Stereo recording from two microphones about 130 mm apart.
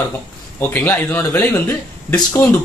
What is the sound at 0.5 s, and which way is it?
Speech, 15° left (ahead or behind).